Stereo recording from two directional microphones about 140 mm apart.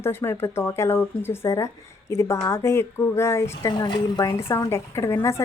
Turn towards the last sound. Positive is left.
turn(degrees=20)  # may be behind; listen again after turning